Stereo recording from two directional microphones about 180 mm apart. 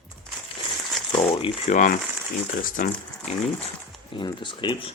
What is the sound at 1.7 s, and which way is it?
Speech, 45° left (ahead or behind).